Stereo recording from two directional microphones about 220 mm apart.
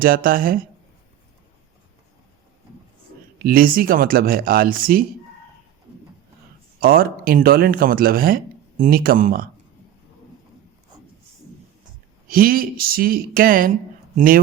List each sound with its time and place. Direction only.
0.0 s speech: 40° right (ahead or behind)
3.3 s speech: 40° right (ahead or behind)
6.7 s speech: 40° right (ahead or behind)
12.3 s speech: 40° right (ahead or behind)